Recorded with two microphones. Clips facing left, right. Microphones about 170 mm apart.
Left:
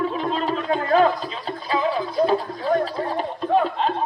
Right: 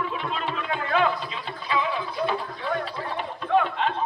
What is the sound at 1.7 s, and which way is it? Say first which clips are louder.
Music: left 4 dB; 40° left (ahead or behind).